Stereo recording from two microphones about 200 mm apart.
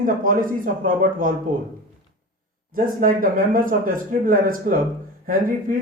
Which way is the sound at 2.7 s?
45° right (ahead or behind).